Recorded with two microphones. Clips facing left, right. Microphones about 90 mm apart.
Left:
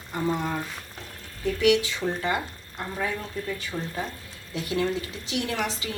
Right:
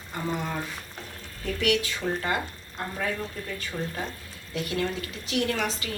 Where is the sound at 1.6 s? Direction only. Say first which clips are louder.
Left 4 dB; 20° left (ahead or behind).